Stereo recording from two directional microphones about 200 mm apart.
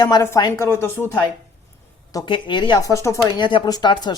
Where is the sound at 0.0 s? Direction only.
15° left (ahead or behind).